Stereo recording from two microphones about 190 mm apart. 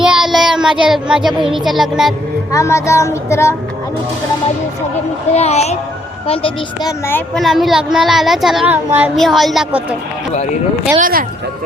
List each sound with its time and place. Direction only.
0.0 s child singing: 5° right (ahead or behind)
0.9 s a child's voice: 5° right (ahead or behind)
2.5 s child singing: 15° left (ahead or behind)
5.3 s a woman's voice: 35° left (ahead or behind)
7.3 s a child's voice: centre (ahead or behind)
10.3 s a woman's voice: 35° left (ahead or behind)
10.9 s speech: 45° right (ahead or behind)